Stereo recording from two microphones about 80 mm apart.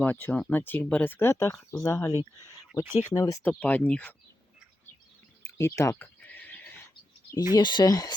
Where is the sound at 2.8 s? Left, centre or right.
Right.